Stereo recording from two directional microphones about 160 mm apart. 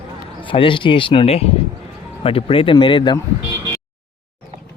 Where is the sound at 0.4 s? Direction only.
35° left (ahead or behind).